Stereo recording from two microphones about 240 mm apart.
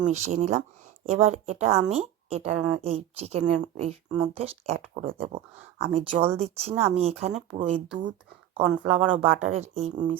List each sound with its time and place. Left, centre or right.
0.0 s a woman's voice: right
8.9 s a woman's voice: right